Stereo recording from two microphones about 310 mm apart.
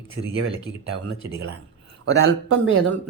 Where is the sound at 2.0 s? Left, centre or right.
Right.